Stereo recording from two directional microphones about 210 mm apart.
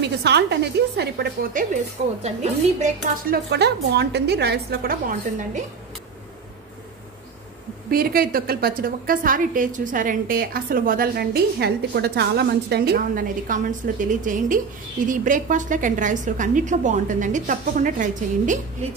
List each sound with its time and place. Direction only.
0.0 s a woman's voice: 50° right (ahead or behind)
2.2 s a woman's voice: 30° right (ahead or behind)
3.3 s a woman's voice: 50° right (ahead or behind)
7.9 s a woman's voice: 45° right (ahead or behind)